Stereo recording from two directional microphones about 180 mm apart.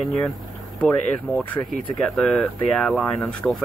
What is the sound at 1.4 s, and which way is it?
Speech, 5° left (ahead or behind).